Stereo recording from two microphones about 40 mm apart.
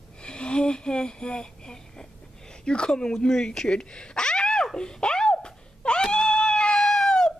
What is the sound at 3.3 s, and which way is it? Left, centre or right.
Speech, centre.